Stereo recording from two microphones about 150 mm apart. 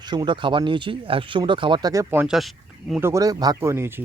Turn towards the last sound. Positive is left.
turn(degrees=-15)  # may be behind; listen again after turning